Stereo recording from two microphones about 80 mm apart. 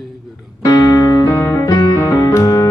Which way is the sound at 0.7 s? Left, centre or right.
Left.